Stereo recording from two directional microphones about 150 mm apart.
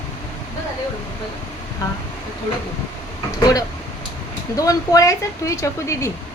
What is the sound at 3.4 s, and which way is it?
A woman's voice, 25° left (ahead or behind).